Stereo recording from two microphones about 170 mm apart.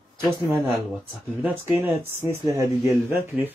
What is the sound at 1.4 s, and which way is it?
Speech, 10° right (ahead or behind).